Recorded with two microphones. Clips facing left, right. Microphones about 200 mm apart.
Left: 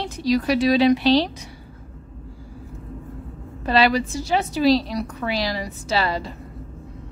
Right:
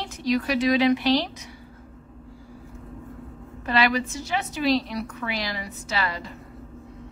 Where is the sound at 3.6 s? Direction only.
35° left (ahead or behind).